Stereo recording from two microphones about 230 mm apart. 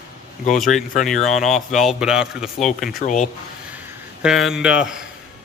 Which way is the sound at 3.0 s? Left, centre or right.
Left.